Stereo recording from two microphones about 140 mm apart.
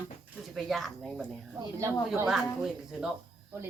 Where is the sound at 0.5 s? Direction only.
Centre (ahead or behind).